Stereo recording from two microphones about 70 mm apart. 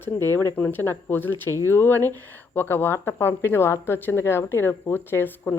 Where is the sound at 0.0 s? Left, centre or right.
Left.